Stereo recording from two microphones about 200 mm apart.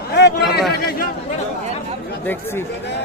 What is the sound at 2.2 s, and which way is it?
Speech, 10° left (ahead or behind).